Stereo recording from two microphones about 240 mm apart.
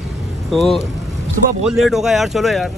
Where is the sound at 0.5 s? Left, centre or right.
Centre.